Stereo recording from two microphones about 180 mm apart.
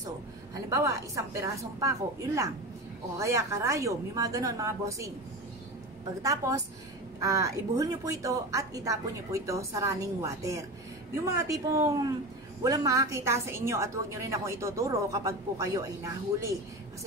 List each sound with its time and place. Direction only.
0.7 s a woman's voice: 15° right (ahead or behind)
6.2 s a woman's voice: 20° right (ahead or behind)